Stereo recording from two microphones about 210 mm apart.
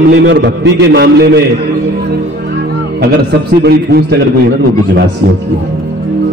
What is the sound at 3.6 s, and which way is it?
Speech, 50° right (ahead or behind).